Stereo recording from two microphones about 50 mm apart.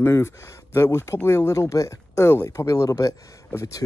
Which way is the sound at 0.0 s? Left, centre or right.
Left.